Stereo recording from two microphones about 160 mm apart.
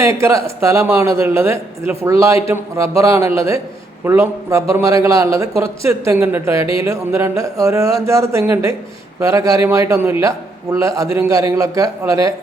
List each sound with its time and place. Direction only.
0.2 s a man's voice: 20° right (ahead or behind)